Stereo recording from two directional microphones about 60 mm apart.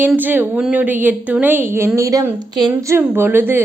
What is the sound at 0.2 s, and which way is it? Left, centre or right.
A woman's voice, right.